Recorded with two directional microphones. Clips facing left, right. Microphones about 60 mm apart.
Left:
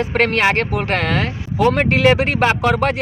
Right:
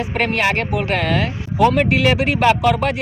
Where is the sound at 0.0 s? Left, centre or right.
Left.